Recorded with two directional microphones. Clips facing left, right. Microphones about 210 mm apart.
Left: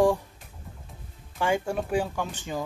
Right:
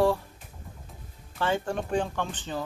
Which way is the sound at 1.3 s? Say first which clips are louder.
Left 2 dB; 10° left (ahead or behind).